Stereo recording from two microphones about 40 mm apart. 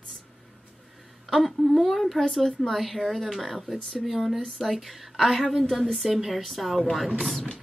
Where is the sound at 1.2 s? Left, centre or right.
Centre.